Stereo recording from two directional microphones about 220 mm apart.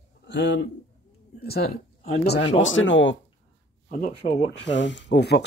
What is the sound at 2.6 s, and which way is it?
Speech, 60° left (ahead or behind).